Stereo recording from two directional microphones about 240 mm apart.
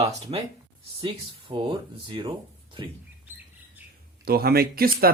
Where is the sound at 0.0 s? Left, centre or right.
Right.